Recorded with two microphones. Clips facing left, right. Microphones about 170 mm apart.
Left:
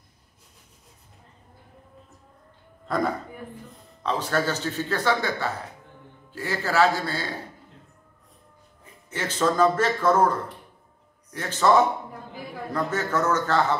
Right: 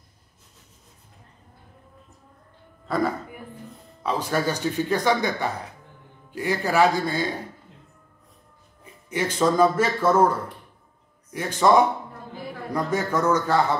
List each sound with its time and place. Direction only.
2.9 s a man's voice: centre (ahead or behind)
9.1 s speech: 10° right (ahead or behind)
11.3 s speech: 15° right (ahead or behind)